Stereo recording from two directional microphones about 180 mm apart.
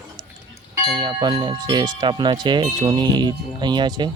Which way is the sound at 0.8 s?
25° right (ahead or behind).